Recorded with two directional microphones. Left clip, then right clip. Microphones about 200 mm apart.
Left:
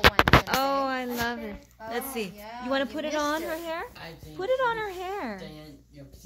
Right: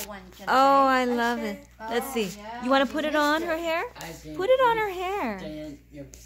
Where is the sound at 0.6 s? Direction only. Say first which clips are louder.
Right 8 dB; 15° right (ahead or behind); by 5.4 s centre (ahead or behind).